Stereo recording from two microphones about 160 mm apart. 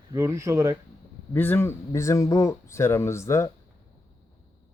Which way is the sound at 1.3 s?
15° left (ahead or behind).